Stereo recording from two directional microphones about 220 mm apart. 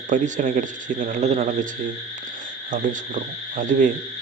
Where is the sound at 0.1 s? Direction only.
35° right (ahead or behind).